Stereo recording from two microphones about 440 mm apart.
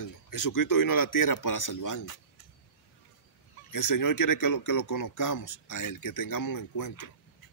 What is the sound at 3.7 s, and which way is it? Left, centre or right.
Speech, left.